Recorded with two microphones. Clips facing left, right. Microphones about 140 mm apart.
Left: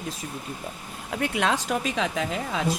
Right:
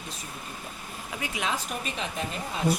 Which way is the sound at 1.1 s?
60° left (ahead or behind).